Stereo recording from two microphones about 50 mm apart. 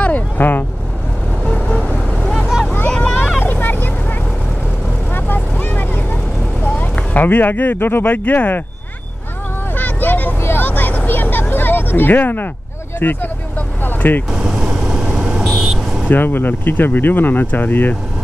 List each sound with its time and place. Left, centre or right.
0.0 s vehicle: left
1.4 s vehicle: left
3.3 s vehicle: left
5.1 s vehicle: left
6.6 s speech: left
9.8 s vehicle: left
11.1 s a sound: left
13.0 s speech: left
13.8 s vehicle: left
14.3 s vehicle: centre
16.1 s speech: left